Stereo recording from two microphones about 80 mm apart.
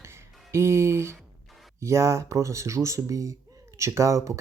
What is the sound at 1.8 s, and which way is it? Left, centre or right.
Speech, right.